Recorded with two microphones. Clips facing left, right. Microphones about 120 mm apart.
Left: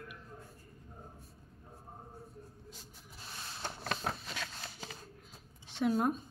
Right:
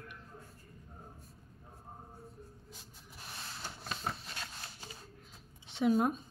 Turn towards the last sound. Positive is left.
turn(degrees=0)  # may be behind; listen again after turning